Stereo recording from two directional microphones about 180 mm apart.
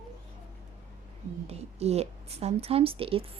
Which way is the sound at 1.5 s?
35° right (ahead or behind).